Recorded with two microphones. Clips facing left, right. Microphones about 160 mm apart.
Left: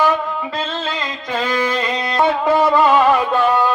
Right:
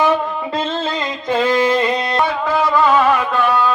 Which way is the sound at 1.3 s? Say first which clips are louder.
Right 5 dB; 20° right (ahead or behind).